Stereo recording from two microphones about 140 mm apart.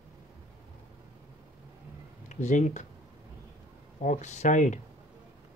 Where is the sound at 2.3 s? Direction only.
60° left (ahead or behind).